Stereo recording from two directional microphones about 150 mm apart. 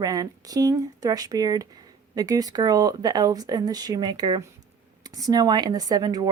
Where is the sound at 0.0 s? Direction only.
25° right (ahead or behind).